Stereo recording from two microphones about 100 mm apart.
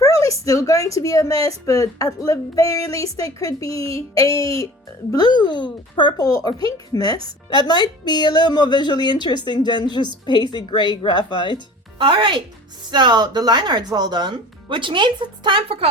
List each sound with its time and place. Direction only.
0.3 s speech: 35° left (ahead or behind)
5.1 s a woman's voice: 45° left (ahead or behind)
6.1 s speech: 40° left (ahead or behind)
7.7 s a woman's voice: 45° left (ahead or behind)
11.9 s speech: 55° right (ahead or behind)
15.8 s speech: 70° right (ahead or behind)